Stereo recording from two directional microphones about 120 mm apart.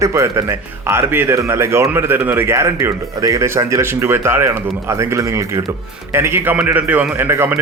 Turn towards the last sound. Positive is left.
turn(degrees=-20)  # may be behind; listen again after turning